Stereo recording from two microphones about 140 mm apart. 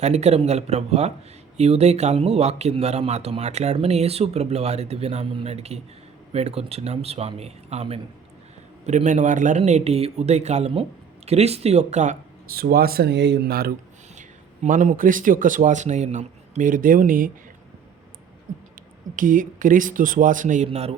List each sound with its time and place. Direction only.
0.0 s a man's voice: 50° right (ahead or behind)
8.9 s a man's voice: 60° right (ahead or behind)
12.5 s speech: 90° right
14.2 s a man's voice: 65° right (ahead or behind)
19.1 s speech: 75° right (ahead or behind)
20.7 s a man's voice: 45° right (ahead or behind)